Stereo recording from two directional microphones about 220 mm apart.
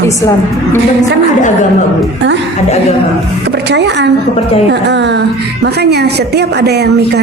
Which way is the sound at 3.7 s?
50° right (ahead or behind).